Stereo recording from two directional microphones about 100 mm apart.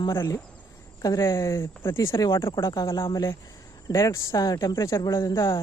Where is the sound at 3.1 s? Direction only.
30° left (ahead or behind).